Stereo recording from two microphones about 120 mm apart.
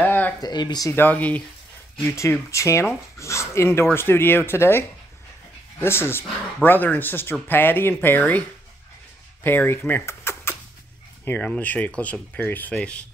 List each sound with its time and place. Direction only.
0.0 s a sound: 15° left (ahead or behind)
0.4 s speech: 35° left (ahead or behind)
0.8 s speech: 15° left (ahead or behind)